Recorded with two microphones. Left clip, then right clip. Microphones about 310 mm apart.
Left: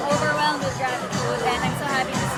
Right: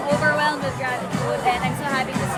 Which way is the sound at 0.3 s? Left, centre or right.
Centre.